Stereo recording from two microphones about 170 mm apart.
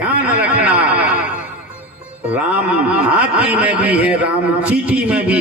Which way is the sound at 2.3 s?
10° right (ahead or behind).